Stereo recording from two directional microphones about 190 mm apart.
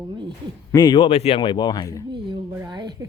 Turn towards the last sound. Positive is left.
turn(degrees=-20)  # may be behind; listen again after turning